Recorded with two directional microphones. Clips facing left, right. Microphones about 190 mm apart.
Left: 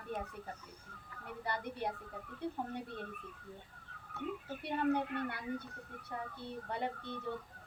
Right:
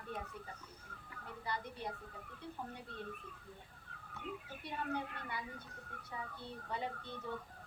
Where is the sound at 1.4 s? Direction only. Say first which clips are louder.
Left 4 dB; 60° left (ahead or behind).